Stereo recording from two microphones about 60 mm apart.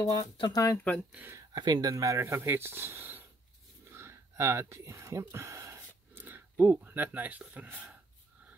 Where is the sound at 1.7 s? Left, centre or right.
Right.